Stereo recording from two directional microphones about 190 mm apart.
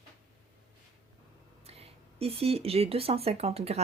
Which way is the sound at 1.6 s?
30° right (ahead or behind).